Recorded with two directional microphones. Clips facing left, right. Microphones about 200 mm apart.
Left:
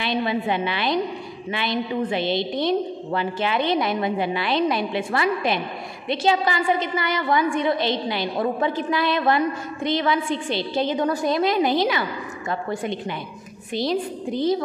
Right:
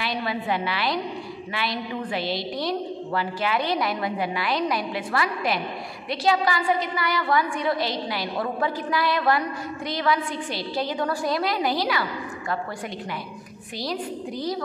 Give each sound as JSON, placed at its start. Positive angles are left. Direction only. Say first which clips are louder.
{"t": 0.0, "sound": "a woman's voice", "louder": "left 5 dB", "side_deg": 25}